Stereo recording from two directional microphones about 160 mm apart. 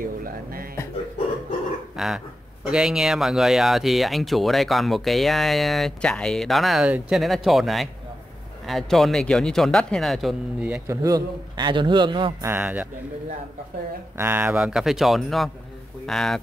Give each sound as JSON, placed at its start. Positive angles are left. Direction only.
{"t": 0.0, "sound": "a sound", "side_deg": -65}
{"t": 2.0, "sound": "a man's voice", "side_deg": 0}
{"t": 10.9, "sound": "a man's voice", "side_deg": -20}
{"t": 12.4, "sound": "speech", "side_deg": -15}
{"t": 14.1, "sound": "a man's voice", "side_deg": -15}